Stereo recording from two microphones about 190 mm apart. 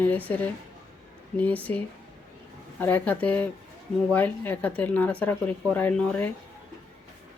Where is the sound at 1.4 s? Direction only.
10° left (ahead or behind).